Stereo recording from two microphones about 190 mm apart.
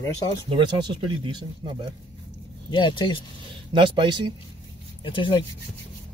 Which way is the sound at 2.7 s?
25° left (ahead or behind).